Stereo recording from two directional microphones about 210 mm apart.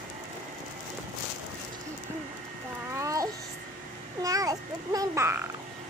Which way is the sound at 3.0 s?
15° right (ahead or behind).